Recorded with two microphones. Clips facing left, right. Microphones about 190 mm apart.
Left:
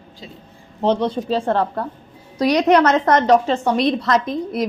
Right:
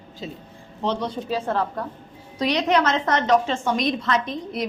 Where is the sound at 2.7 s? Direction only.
60° left (ahead or behind).